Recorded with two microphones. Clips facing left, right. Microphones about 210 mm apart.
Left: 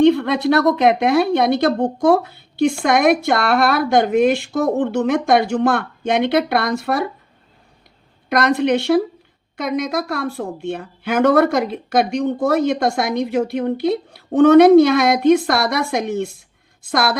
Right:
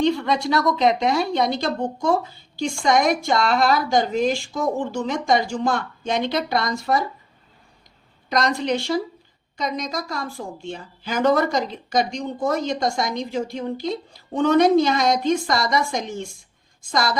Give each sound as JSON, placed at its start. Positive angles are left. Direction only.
{"t": 0.0, "sound": "speech", "side_deg": 60}
{"t": 8.3, "sound": "speech", "side_deg": 60}